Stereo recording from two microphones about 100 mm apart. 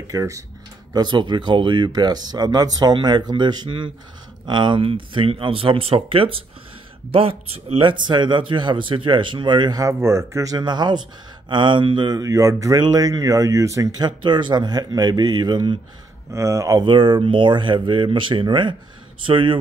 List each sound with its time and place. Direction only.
0.1 s speech: 35° right (ahead or behind)
0.9 s speech: 50° right (ahead or behind); by 7.8 s 80° right
7.8 s speech: 50° right (ahead or behind)
9.9 s speech: 30° right (ahead or behind); by 15.8 s 50° right (ahead or behind)
16.3 s speech: 30° right (ahead or behind)
16.8 s speech: 55° right (ahead or behind)